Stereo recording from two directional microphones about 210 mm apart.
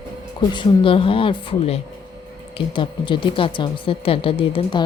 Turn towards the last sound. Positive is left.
turn(degrees=25)  # may be behind; listen again after turning